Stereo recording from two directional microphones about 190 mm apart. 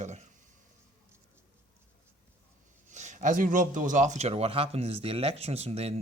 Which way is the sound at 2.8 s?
40° right (ahead or behind).